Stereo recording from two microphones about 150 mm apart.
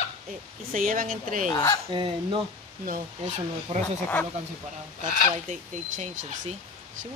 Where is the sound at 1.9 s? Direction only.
30° right (ahead or behind).